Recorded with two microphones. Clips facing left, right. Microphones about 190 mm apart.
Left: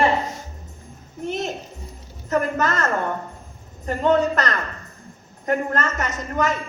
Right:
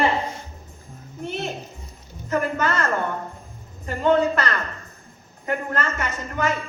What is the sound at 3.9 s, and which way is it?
A woman's voice, 40° left (ahead or behind).